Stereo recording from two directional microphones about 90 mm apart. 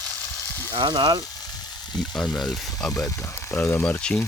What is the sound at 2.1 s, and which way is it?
Speech, 10° left (ahead or behind).